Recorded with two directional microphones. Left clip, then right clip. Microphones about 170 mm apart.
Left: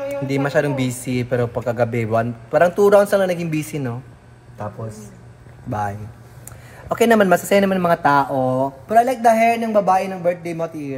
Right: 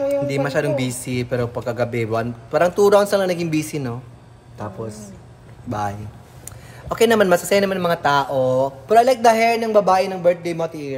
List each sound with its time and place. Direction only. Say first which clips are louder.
0.3 s speech: left 1 dB; 10° right (ahead or behind)